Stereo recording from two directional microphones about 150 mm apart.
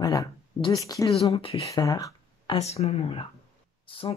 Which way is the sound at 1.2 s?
40° left (ahead or behind).